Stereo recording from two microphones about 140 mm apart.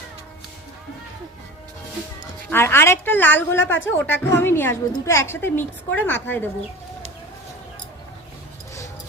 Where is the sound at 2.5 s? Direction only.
15° left (ahead or behind).